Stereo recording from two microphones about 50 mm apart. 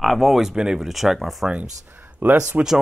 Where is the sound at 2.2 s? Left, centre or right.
Right.